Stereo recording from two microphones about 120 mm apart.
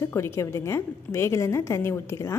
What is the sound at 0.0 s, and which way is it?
A woman's voice, 25° left (ahead or behind).